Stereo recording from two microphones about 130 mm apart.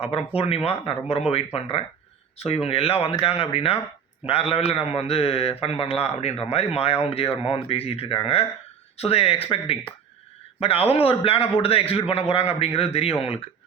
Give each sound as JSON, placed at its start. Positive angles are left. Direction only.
{"t": 0.0, "sound": "a man's voice", "side_deg": 45}